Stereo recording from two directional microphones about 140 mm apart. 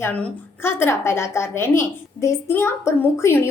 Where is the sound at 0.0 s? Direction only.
15° left (ahead or behind).